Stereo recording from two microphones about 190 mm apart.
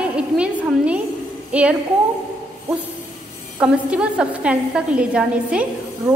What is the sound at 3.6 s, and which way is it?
A woman's voice, 5° right (ahead or behind).